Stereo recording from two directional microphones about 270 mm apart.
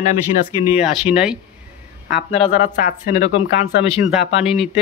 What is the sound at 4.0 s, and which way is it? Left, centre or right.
Speech, centre.